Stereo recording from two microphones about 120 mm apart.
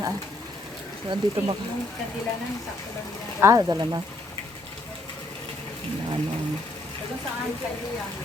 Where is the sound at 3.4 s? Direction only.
25° right (ahead or behind).